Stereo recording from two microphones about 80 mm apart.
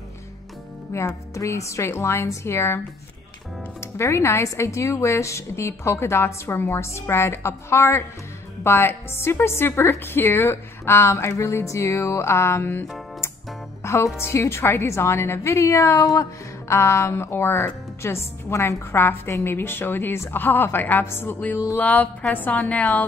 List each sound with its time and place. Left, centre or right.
0.9 s speech: left
3.8 s speech: left
13.8 s a woman's voice: left; by 23.0 s centre